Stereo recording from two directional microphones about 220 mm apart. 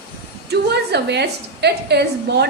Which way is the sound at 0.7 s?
50° right (ahead or behind).